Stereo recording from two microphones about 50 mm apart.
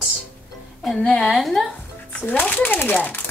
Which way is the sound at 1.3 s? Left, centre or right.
Centre.